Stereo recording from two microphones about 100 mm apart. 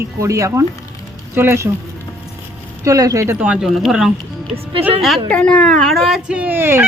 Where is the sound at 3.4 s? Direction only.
10° right (ahead or behind).